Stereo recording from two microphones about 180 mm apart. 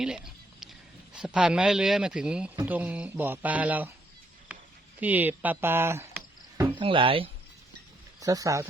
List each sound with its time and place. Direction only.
0.0 s a sound: 5° right (ahead or behind)
1.1 s a man's voice: 5° right (ahead or behind)
4.5 s a sound: 5° right (ahead or behind)
4.9 s speech: 10° right (ahead or behind)
6.7 s speech: 30° right (ahead or behind)
8.2 s speech: 20° right (ahead or behind)